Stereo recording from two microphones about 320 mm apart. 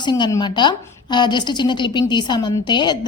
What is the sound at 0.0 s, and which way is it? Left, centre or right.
A woman's voice, centre.